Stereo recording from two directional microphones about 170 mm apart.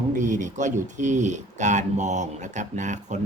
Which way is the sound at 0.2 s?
45° right (ahead or behind).